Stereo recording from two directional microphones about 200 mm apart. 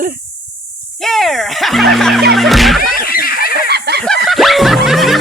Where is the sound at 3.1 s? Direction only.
45° left (ahead or behind).